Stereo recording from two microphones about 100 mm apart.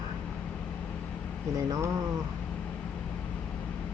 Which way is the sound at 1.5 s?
35° right (ahead or behind).